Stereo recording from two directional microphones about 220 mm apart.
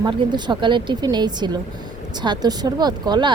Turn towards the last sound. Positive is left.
turn(degrees=-20)  # may be behind; listen again after turning